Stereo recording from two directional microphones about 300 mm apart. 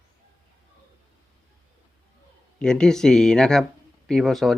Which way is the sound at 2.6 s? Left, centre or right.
Centre.